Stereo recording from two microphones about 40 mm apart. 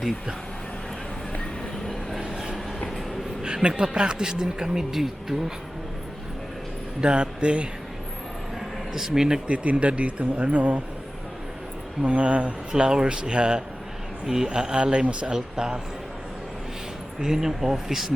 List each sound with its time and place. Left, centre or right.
2.3 s train: centre
3.4 s a sound: right
3.9 s speech: right; by 5.4 s centre
7.0 s speech: right
9.0 s speech: centre
9.5 s speech: right
12.0 s speech: right
17.2 s speech: centre